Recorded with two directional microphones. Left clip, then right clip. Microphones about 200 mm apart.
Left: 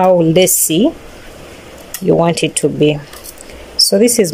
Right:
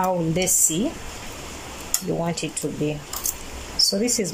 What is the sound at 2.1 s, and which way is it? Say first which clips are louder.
Speech: left 16 dB; 50° left (ahead or behind).